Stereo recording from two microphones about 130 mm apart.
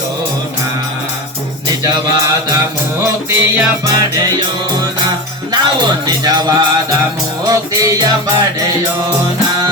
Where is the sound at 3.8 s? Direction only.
30° right (ahead or behind).